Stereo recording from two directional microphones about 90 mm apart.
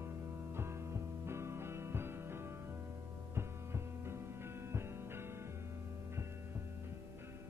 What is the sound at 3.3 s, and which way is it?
Music, 30° right (ahead or behind).